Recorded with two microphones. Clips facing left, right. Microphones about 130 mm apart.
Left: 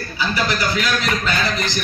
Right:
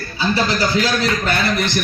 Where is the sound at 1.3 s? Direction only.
60° right (ahead or behind).